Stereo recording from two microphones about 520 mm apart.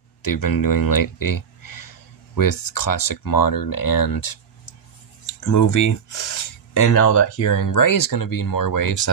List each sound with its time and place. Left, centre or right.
0.2 s speech: left
5.5 s speech: left